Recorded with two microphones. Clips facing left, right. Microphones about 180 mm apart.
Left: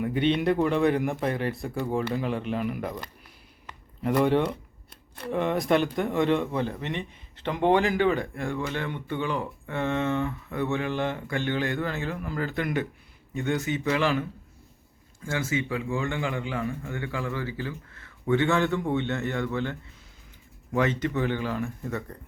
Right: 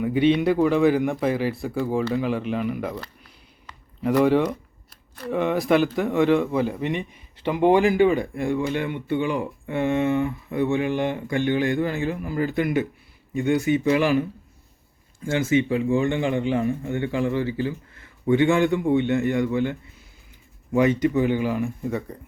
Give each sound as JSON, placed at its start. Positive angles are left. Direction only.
{"t": 0.0, "sound": "a man's voice", "side_deg": -5}
{"t": 4.0, "sound": "a man's voice", "side_deg": 0}
{"t": 15.3, "sound": "a man's voice", "side_deg": -20}
{"t": 20.7, "sound": "speech", "side_deg": -15}